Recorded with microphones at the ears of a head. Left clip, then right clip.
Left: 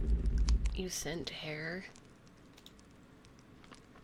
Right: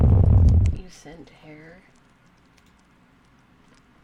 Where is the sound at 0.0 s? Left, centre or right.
Right.